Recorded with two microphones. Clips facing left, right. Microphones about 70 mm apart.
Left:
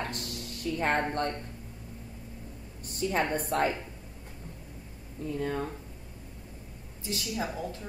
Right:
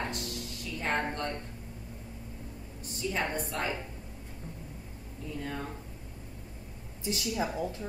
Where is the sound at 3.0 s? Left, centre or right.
Left.